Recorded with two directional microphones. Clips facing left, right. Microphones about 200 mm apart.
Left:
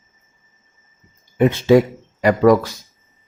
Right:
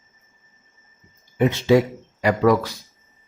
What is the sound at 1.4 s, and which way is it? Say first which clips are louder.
Speech: left 4 dB; 50° left (ahead or behind).